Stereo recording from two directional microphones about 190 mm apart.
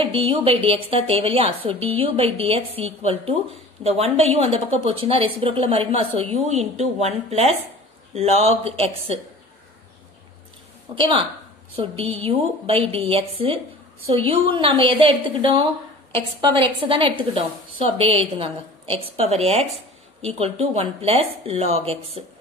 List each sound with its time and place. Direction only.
0.0 s a woman's voice: 30° right (ahead or behind)
11.0 s a woman's voice: 25° right (ahead or behind)